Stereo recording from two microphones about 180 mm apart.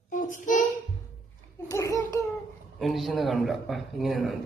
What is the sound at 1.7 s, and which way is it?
Babbling, 20° left (ahead or behind).